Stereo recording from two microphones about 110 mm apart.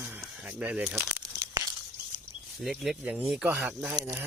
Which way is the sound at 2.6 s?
Centre (ahead or behind).